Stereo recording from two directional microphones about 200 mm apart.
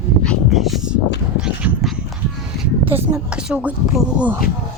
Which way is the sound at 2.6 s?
10° right (ahead or behind).